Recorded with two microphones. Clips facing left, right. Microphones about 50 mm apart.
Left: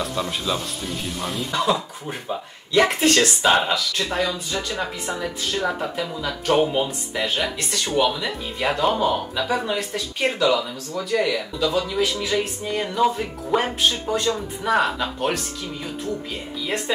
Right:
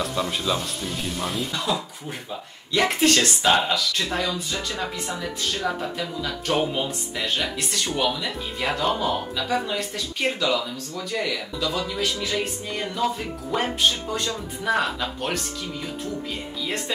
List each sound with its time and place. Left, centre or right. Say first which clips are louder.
0.0 s speech: even; centre
1.7 s speech: left 4 dB; left
3.0 s speech: left 2 dB; centre
16.6 s speech: left 4 dB; centre